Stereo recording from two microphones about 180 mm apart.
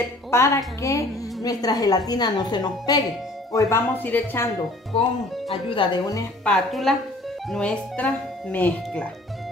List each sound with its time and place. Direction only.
0.3 s a woman's voice: 15° left (ahead or behind)
4.9 s a woman's voice: 30° left (ahead or behind)
6.4 s speech: centre (ahead or behind)